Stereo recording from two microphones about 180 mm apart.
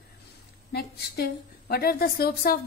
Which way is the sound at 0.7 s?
60° left (ahead or behind).